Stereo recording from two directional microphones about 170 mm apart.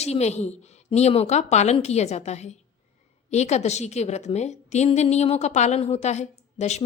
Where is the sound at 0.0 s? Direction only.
40° left (ahead or behind).